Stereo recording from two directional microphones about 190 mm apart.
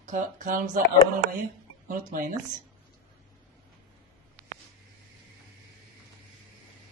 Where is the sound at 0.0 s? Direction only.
40° right (ahead or behind).